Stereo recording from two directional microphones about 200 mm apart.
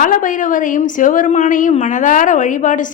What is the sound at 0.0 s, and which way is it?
A woman's voice, 40° left (ahead or behind).